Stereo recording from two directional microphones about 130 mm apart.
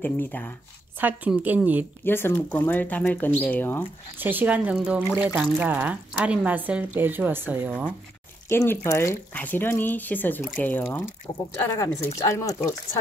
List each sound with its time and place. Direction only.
0.0 s speech: 15° left (ahead or behind)
0.9 s speech: 15° right (ahead or behind)
2.0 s speech: 15° left (ahead or behind)
4.2 s speech: 15° right (ahead or behind)
8.5 s speech: 20° left (ahead or behind)